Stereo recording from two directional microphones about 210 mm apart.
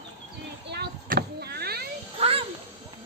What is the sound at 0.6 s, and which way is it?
Vehicle, 50° right (ahead or behind).